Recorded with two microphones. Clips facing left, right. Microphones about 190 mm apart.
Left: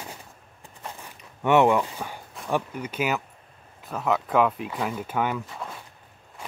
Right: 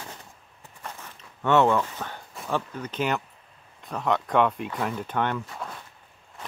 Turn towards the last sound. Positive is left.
turn(degrees=0)  # may be behind; listen again after turning